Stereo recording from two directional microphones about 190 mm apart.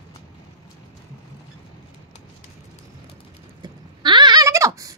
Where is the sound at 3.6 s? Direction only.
25° right (ahead or behind).